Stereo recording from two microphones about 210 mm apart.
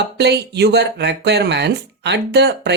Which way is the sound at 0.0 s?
55° right (ahead or behind).